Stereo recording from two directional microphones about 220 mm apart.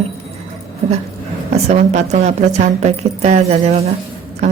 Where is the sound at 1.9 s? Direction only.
30° right (ahead or behind).